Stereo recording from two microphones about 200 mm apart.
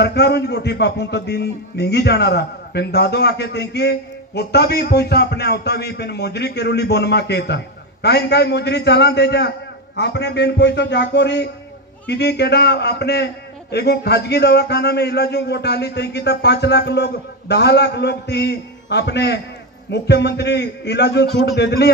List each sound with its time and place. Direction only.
0.0 s a man's voice: 55° left (ahead or behind)